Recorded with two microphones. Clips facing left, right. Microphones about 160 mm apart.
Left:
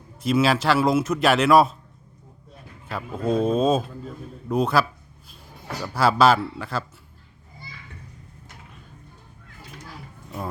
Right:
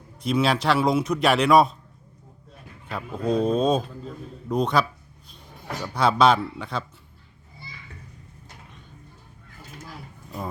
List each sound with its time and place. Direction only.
0.2 s a man's voice: centre (ahead or behind)
2.8 s a man's voice: 5° left (ahead or behind)